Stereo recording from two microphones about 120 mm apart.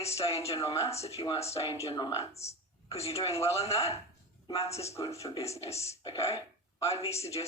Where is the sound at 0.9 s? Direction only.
60° left (ahead or behind).